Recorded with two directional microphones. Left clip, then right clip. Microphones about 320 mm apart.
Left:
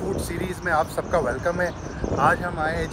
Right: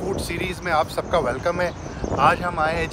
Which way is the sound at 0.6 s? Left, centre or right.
Centre.